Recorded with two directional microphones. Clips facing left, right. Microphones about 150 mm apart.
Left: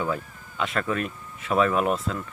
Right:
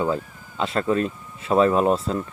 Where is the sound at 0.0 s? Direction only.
30° right (ahead or behind).